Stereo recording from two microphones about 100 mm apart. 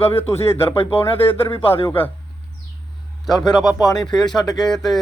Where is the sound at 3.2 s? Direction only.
Centre (ahead or behind).